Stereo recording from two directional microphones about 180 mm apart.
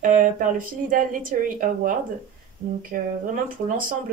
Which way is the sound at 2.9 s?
50° right (ahead or behind).